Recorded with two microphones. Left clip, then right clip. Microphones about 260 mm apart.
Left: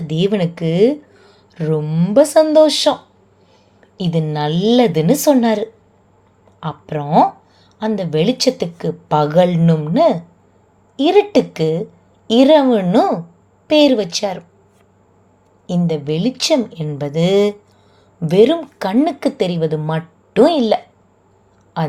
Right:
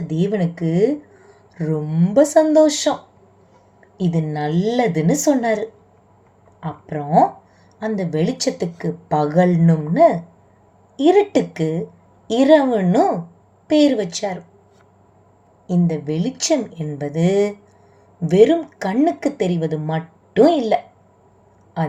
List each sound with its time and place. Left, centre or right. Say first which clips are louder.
0.1 s speech: left 4 dB; left
4.0 s speech: left 3 dB; left
15.6 s a woman's voice: left 3 dB; left